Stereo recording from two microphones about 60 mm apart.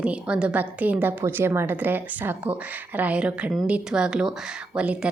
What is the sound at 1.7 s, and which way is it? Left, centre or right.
Speech, right.